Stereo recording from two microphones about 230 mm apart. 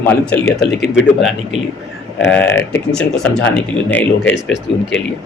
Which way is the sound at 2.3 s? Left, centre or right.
Centre.